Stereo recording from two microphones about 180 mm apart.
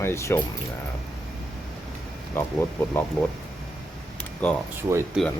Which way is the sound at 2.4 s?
15° left (ahead or behind).